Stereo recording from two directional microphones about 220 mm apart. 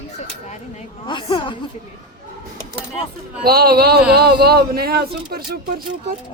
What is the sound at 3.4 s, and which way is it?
Speech, 45° right (ahead or behind).